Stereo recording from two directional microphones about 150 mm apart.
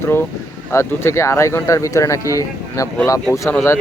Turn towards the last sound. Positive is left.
turn(degrees=15)  # may be behind; listen again after turning